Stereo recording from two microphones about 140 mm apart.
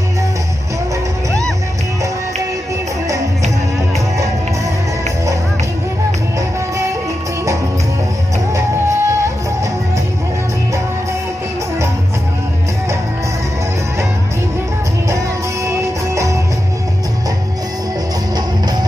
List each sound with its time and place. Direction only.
8.5 s music: 20° right (ahead or behind)
15.6 s music: 20° right (ahead or behind)